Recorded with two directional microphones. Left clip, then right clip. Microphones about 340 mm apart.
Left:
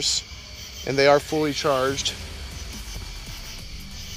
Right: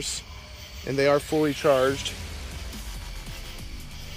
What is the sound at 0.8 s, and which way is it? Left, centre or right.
Speech, centre.